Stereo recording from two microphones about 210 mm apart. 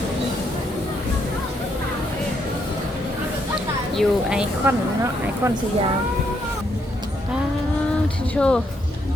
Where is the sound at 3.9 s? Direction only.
Centre (ahead or behind).